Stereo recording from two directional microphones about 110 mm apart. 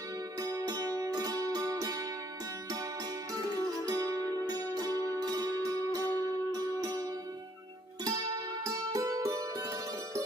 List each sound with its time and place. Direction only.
0.4 s music: 35° right (ahead or behind)
3.8 s music: 35° right (ahead or behind)